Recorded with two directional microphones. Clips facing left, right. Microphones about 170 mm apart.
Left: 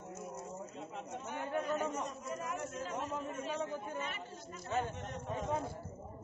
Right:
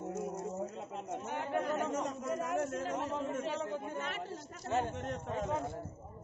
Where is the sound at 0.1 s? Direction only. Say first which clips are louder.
Right 5 dB; 90° right.